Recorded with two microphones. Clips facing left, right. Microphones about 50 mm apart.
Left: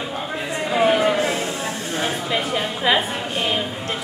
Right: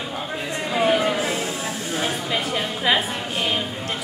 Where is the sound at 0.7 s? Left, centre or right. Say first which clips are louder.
Left 3 dB; centre.